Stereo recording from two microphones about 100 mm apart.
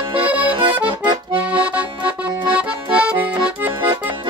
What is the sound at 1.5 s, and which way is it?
Accordion, 15° right (ahead or behind).